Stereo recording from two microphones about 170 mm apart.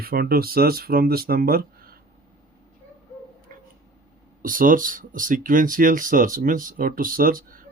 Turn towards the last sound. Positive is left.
turn(degrees=-55)  # may be behind; listen again after turning